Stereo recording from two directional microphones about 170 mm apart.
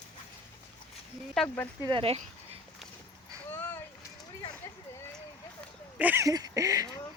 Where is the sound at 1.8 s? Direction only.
30° right (ahead or behind).